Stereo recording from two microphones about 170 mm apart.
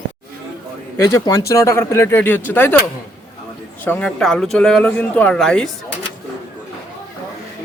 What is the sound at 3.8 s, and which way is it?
Speech, 10° left (ahead or behind).